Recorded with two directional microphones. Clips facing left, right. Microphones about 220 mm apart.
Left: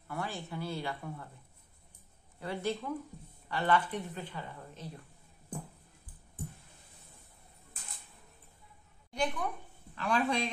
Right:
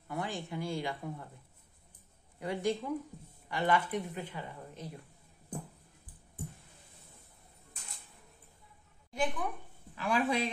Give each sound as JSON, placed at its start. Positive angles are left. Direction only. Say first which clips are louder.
{"t": 0.1, "sound": "a woman's voice", "louder": "right 1 dB", "side_deg": -15}
{"t": 2.4, "sound": "a woman's voice", "louder": "right 2 dB", "side_deg": -15}
{"t": 9.1, "sound": "a woman's voice", "louder": "even", "side_deg": -5}